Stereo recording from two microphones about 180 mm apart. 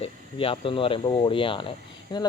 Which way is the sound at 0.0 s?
30° left (ahead or behind).